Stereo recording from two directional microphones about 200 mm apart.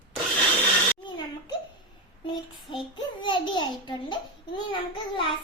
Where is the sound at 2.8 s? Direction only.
25° left (ahead or behind).